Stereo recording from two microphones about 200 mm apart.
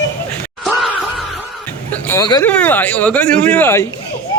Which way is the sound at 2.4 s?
5° left (ahead or behind).